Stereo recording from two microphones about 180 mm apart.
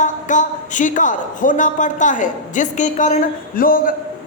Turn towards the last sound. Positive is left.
turn(degrees=50)  # may be behind; listen again after turning